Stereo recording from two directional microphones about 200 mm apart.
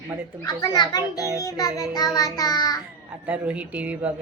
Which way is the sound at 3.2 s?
5° right (ahead or behind).